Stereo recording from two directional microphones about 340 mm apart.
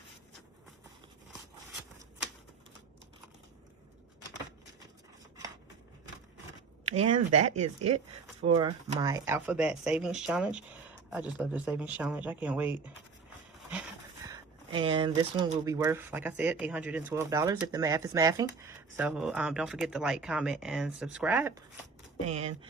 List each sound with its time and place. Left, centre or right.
6.8 s a sound: centre
7.1 s speech: right
8.4 s speech: centre
14.3 s speech: centre
22.3 s speech: centre